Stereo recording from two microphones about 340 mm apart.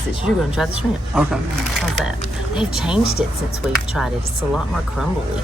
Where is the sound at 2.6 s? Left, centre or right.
Centre.